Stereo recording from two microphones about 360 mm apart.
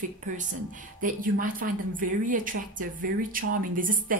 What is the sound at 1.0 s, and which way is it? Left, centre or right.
Speech, right.